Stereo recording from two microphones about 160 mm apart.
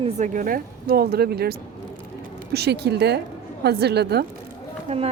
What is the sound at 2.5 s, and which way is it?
Speech, 90° right.